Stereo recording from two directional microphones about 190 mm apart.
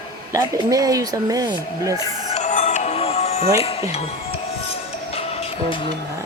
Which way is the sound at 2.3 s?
40° left (ahead or behind).